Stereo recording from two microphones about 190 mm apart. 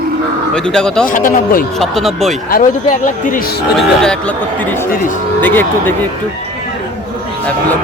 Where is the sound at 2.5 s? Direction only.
45° left (ahead or behind).